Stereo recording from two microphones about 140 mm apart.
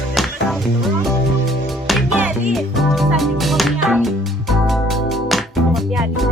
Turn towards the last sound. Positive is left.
turn(degrees=0)  # may be behind; listen again after turning